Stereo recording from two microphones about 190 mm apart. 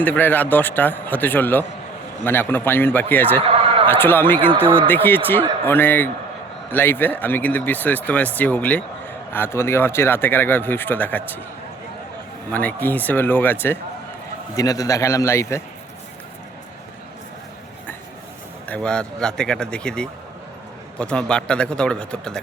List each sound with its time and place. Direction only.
0.0 s speech: 10° left (ahead or behind)
3.4 s a sound: 30° right (ahead or behind)
3.8 s speech: 10° left (ahead or behind)
12.5 s speech: 10° left (ahead or behind)
18.7 s speech: 5° left (ahead or behind)